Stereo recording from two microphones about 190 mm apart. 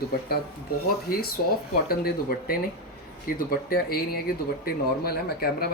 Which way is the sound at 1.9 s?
50° left (ahead or behind).